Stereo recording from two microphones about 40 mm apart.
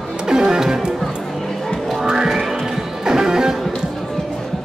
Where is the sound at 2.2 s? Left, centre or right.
Centre.